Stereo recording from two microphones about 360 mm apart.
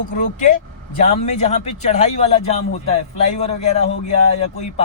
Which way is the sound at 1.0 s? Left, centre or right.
Centre.